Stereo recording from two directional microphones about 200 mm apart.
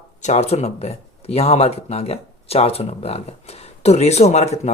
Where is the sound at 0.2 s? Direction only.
35° left (ahead or behind).